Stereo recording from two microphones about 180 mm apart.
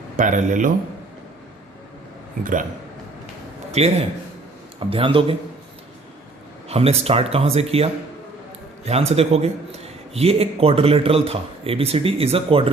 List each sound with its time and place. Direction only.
0.2 s speech: 45° right (ahead or behind)
2.4 s speech: 45° right (ahead or behind)
3.7 s a man's voice: 35° right (ahead or behind)
6.7 s a man's voice: 35° right (ahead or behind)